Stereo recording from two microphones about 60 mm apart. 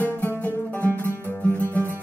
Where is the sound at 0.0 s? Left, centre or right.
Left.